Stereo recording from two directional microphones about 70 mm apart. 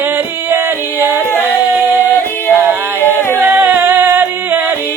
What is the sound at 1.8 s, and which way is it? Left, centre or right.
Singing, right.